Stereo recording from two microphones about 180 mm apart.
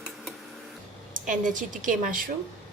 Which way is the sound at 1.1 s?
45° right (ahead or behind).